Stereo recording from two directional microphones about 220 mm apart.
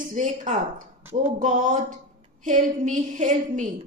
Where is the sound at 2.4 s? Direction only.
35° right (ahead or behind).